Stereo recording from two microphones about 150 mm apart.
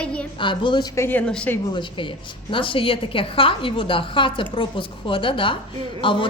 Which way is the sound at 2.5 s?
35° left (ahead or behind).